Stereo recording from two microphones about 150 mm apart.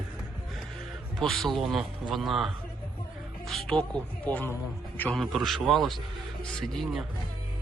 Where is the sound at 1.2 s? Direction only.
Centre (ahead or behind).